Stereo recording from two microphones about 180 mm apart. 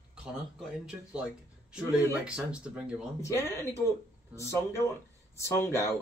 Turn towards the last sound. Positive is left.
turn(degrees=15)  # may be behind; listen again after turning